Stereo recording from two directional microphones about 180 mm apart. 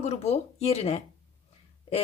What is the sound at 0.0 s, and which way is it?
Speech, 35° left (ahead or behind).